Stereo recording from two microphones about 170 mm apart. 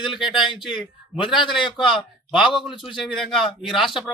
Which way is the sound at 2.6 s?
Centre (ahead or behind).